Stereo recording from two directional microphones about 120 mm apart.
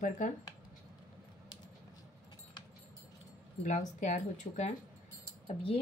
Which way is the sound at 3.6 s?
85° left.